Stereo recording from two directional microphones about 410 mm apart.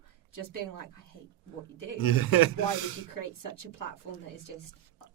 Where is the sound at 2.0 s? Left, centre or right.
Left.